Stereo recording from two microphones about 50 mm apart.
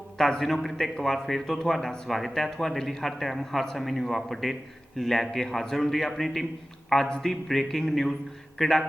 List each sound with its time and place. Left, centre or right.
0.2 s a man's voice: centre